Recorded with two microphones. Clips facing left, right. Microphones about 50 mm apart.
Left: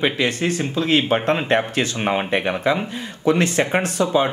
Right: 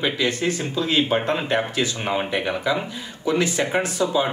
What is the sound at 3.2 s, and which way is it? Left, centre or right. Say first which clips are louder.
Speech: left 3 dB; left.